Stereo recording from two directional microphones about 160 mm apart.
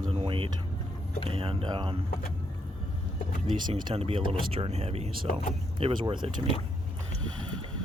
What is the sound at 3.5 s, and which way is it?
Speech, 30° right (ahead or behind).